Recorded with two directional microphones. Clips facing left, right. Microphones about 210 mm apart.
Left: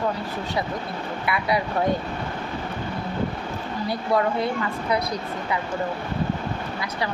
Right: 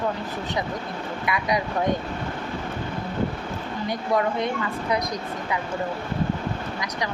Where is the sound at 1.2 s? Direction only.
15° right (ahead or behind).